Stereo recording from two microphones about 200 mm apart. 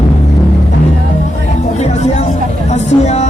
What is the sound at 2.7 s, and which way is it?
Vehicle, 35° left (ahead or behind).